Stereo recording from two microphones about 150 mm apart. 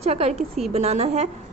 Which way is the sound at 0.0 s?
45° right (ahead or behind).